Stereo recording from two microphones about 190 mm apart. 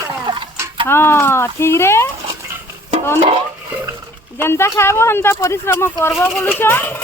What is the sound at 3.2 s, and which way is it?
Stir, 25° right (ahead or behind).